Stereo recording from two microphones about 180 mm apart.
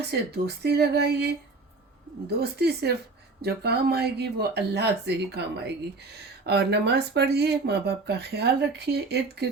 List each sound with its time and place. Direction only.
0.0 s speech: 65° right (ahead or behind)